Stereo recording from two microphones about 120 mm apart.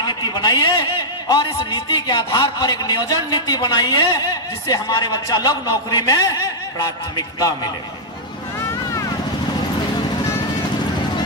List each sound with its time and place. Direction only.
0.0 s a man's voice: 35° left (ahead or behind)